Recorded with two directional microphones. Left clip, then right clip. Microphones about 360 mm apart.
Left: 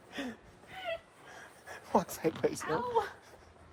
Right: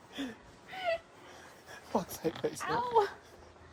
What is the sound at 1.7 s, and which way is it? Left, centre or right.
Speech, left.